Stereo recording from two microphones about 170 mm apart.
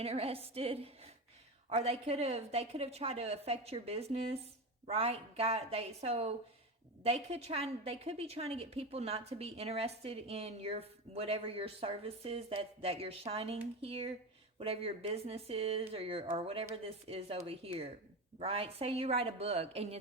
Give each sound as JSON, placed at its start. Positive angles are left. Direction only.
{"t": 0.0, "sound": "a woman's voice", "side_deg": -35}